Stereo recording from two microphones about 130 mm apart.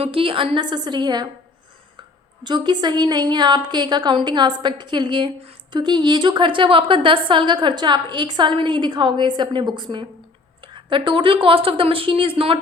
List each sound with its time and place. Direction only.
0.0 s a woman's voice: 45° right (ahead or behind)
2.4 s a woman's voice: 35° right (ahead or behind)